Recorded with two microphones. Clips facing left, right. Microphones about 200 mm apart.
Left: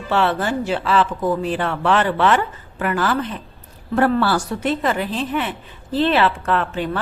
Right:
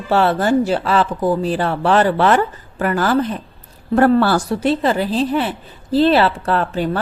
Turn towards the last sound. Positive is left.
turn(degrees=-40)  # may be behind; listen again after turning